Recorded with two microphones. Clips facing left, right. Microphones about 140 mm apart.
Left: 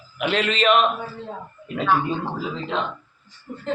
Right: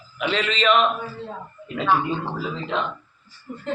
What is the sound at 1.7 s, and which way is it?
Speech, centre (ahead or behind).